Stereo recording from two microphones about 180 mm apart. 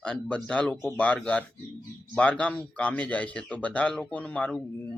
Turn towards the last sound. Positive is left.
turn(degrees=5)  # may be behind; listen again after turning